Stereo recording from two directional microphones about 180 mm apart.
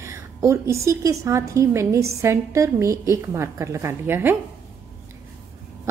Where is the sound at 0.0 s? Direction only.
15° right (ahead or behind).